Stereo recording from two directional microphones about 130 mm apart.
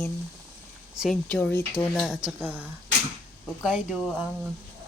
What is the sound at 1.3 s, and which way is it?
Speech, 15° left (ahead or behind).